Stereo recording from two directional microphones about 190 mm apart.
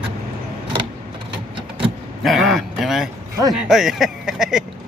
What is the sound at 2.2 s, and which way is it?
Speech, centre (ahead or behind).